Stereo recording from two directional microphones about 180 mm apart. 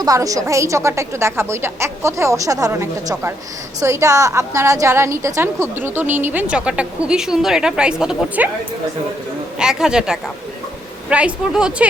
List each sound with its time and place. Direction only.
0.0 s a woman's voice: 20° right (ahead or behind)
9.6 s a woman's voice: 5° right (ahead or behind)